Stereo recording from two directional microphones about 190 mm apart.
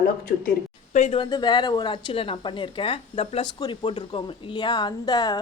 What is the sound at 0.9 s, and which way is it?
Speech, 40° left (ahead or behind).